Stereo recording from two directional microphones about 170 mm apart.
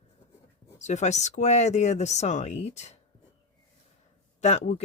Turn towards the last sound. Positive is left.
turn(degrees=40)  # may be behind; listen again after turning